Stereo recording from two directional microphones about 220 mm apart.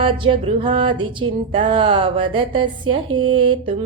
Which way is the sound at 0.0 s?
25° right (ahead or behind).